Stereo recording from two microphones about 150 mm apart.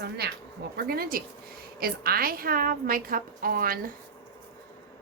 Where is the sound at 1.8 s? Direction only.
90° right; by 3.9 s 70° right (ahead or behind).